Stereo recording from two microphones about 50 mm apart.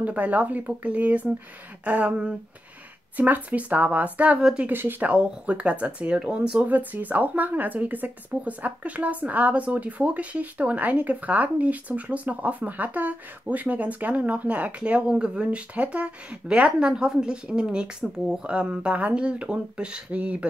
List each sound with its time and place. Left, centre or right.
0.0 s speech: right
4.6 s speech: right
5.0 s speech: right
6.6 s speech: right